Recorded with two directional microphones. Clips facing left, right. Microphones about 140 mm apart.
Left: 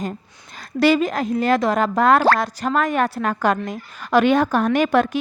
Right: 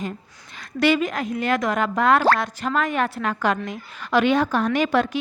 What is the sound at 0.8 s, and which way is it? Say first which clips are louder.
A woman's voice: left 3 dB; 35° left (ahead or behind).